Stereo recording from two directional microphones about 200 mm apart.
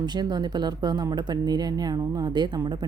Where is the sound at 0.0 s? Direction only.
20° right (ahead or behind).